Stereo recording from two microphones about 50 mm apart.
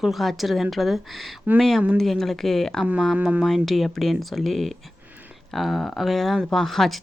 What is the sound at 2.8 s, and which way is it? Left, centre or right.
Speech, right.